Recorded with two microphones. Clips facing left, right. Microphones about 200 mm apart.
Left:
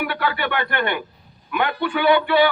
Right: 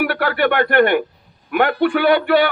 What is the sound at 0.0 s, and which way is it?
A man's voice, 55° right (ahead or behind).